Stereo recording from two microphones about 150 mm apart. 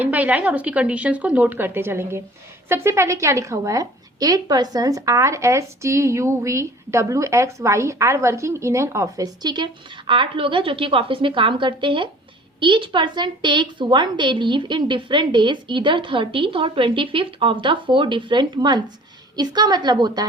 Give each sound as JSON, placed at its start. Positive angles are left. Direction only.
{"t": 0.0, "sound": "a woman's voice", "side_deg": -10}